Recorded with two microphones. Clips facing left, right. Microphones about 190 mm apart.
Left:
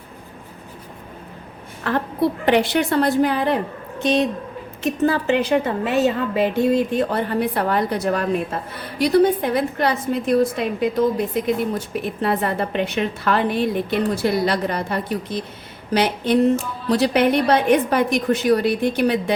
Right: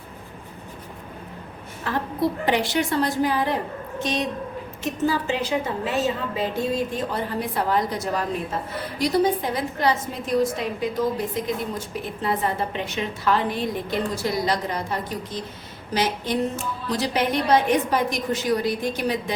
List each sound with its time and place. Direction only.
1.9 s a woman's voice: 60° left (ahead or behind)
4.8 s a woman's voice: 60° left (ahead or behind)